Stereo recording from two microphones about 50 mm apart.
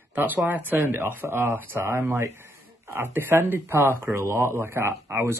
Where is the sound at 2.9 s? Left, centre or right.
Right.